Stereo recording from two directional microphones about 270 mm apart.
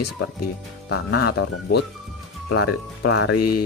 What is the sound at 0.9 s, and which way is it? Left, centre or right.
Speech, left.